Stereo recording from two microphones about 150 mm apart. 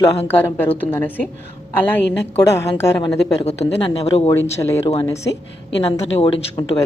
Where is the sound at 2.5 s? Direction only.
20° left (ahead or behind).